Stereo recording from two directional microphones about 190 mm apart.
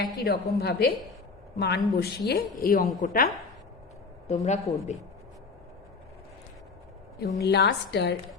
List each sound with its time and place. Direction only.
0.0 s a woman's voice: 55° left (ahead or behind)
4.3 s a woman's voice: 40° left (ahead or behind)
7.3 s a woman's voice: 60° left (ahead or behind)